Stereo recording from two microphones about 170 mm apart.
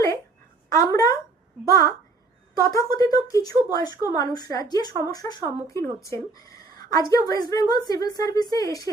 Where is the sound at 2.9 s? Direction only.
20° left (ahead or behind).